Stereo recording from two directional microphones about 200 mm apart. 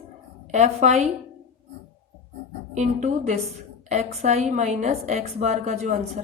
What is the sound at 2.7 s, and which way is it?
A woman's voice, 35° right (ahead or behind).